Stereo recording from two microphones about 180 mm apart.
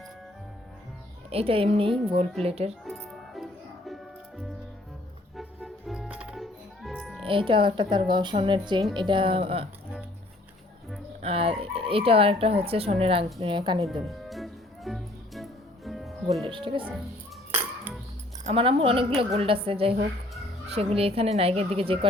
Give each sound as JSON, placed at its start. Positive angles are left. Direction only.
{"t": 1.3, "sound": "a woman's voice", "side_deg": -30}
{"t": 2.8, "sound": "music", "side_deg": 0}
{"t": 7.3, "sound": "a woman's voice", "side_deg": -30}
{"t": 11.2, "sound": "speech", "side_deg": -35}
{"t": 14.0, "sound": "music", "side_deg": 0}
{"t": 16.5, "sound": "speech", "side_deg": -30}
{"t": 18.4, "sound": "a woman's voice", "side_deg": -30}